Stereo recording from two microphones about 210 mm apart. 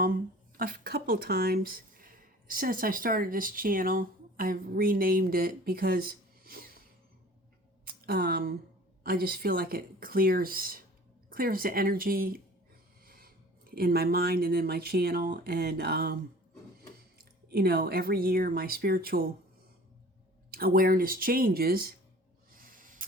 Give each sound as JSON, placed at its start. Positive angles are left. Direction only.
{"t": 0.0, "sound": "speech", "side_deg": -40}
{"t": 8.0, "sound": "speech", "side_deg": -45}
{"t": 17.2, "sound": "speech", "side_deg": -45}
{"t": 20.5, "sound": "speech", "side_deg": -45}
{"t": 22.6, "sound": "a sound", "side_deg": -40}